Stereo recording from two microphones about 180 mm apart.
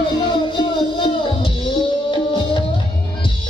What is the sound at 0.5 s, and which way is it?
Music, 30° left (ahead or behind).